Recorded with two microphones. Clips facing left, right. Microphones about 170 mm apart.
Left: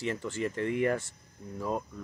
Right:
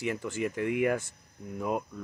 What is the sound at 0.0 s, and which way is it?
Speech, 15° right (ahead or behind).